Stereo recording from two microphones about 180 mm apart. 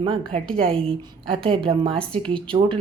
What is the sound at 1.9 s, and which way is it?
Speech, 5° left (ahead or behind).